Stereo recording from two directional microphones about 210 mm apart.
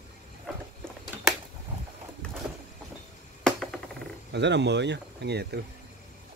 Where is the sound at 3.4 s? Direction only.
Centre (ahead or behind).